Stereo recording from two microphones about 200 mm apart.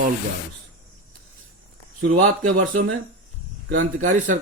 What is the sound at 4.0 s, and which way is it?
Speech, 40° right (ahead or behind).